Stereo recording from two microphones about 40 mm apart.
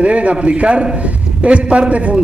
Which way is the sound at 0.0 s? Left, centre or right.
Right.